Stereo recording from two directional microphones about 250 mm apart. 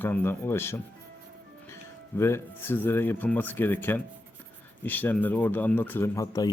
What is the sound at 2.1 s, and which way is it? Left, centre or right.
Speech, centre.